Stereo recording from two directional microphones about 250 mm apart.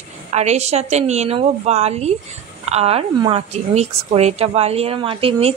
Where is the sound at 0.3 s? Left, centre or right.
Right.